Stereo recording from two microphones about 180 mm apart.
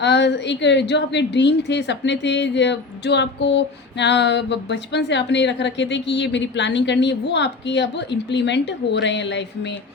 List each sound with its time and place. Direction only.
0.0 s a woman's voice: 75° left (ahead or behind)